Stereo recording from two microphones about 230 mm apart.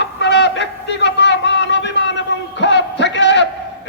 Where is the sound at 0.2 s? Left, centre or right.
Left.